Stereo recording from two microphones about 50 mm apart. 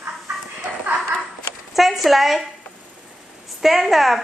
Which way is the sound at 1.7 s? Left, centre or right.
Centre.